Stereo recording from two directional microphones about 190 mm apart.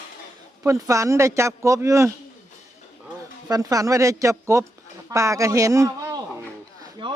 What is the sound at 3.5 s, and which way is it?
A man's voice, 20° right (ahead or behind).